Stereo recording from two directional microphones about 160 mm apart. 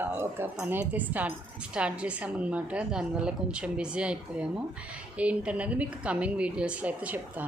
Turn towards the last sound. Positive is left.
turn(degrees=-10)  # may be behind; listen again after turning